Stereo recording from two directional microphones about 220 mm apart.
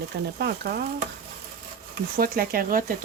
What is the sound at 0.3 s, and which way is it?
Stir, 45° right (ahead or behind).